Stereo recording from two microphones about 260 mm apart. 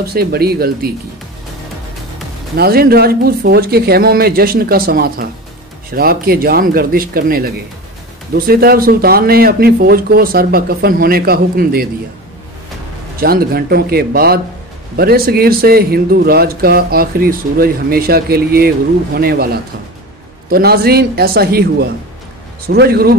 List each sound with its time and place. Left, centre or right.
0.0 s speech: right
2.5 s speech: right
13.2 s speech: right